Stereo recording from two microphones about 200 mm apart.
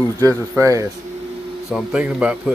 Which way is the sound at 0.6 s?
15° right (ahead or behind).